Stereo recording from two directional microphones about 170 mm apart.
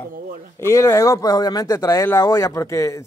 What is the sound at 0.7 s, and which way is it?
Speech, 15° left (ahead or behind).